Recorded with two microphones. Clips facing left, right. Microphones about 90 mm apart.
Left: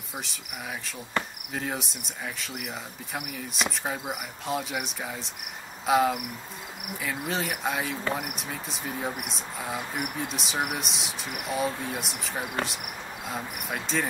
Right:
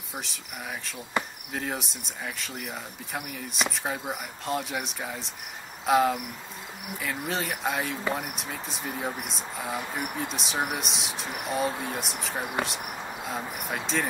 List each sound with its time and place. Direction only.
0.1 s speech: centre (ahead or behind)